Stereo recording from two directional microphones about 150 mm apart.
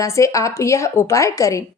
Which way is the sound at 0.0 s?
20° left (ahead or behind).